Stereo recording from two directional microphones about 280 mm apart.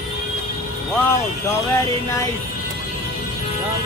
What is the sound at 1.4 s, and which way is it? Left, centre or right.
Speech, centre.